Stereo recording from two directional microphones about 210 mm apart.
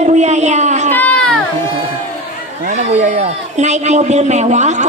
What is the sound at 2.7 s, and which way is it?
A man's voice, 35° right (ahead or behind).